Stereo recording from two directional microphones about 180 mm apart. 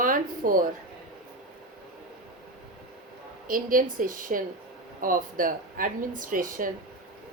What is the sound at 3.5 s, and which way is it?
Speech, 50° right (ahead or behind).